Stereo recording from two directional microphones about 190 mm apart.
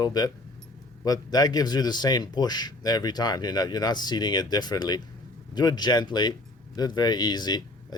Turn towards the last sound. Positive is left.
turn(degrees=20)  # may be behind; listen again after turning